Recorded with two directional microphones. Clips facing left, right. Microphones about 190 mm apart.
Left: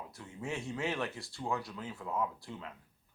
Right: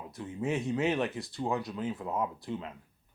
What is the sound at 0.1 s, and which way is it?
Speech, 20° right (ahead or behind).